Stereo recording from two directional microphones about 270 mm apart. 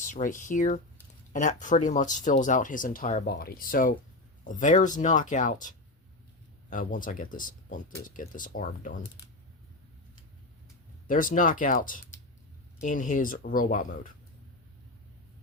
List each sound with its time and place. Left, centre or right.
0.0 s speech: left
11.1 s speech: left